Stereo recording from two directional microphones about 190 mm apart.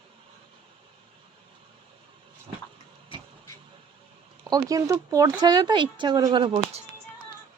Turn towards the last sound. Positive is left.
turn(degrees=-30)  # may be behind; listen again after turning